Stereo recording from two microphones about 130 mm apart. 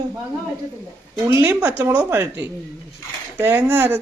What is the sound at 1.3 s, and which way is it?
Speech, 20° right (ahead or behind).